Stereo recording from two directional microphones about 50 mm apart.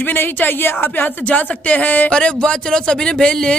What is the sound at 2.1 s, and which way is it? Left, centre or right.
A woman's voice, centre.